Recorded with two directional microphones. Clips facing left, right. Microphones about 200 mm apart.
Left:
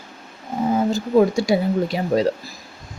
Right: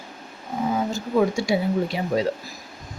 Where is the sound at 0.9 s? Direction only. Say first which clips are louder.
Left 5 dB; 35° left (ahead or behind).